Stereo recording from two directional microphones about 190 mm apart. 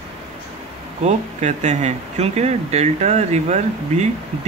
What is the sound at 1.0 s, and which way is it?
Speech, 35° right (ahead or behind).